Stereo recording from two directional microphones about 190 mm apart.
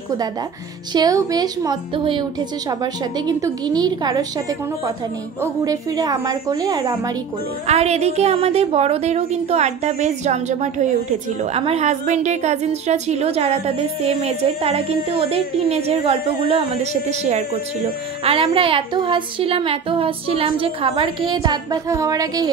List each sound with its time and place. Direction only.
0.9 s a woman's voice: 20° right (ahead or behind)
7.6 s a woman's voice: 35° right (ahead or behind); by 22.5 s 20° right (ahead or behind)